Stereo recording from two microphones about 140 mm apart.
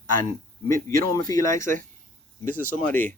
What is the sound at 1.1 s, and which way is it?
Speech, 25° left (ahead or behind).